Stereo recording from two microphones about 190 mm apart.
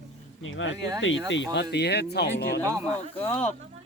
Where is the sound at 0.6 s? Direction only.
85° left; by 2.6 s 60° left (ahead or behind).